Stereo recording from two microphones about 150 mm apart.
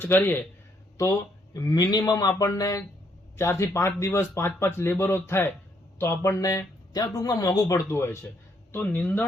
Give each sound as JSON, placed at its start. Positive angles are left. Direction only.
{"t": 0.0, "sound": "speech", "side_deg": 15}
{"t": 1.5, "sound": "speech", "side_deg": 25}